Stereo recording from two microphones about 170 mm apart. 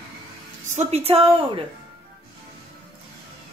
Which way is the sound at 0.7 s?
40° right (ahead or behind).